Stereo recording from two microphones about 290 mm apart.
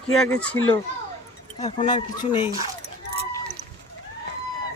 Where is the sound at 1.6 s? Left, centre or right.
Centre.